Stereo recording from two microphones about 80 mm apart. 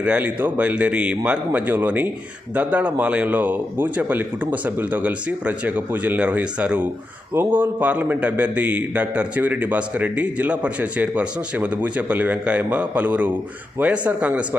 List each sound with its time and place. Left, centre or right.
0.0 s a man's voice: centre